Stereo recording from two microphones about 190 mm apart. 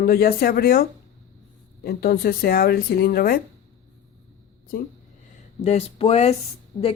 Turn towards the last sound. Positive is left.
turn(degrees=15)  # may be behind; listen again after turning